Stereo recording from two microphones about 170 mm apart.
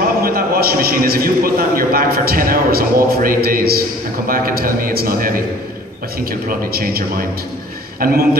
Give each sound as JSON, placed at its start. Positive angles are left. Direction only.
{"t": 0.2, "sound": "a man's voice", "side_deg": -60}
{"t": 6.7, "sound": "a man's voice", "side_deg": -60}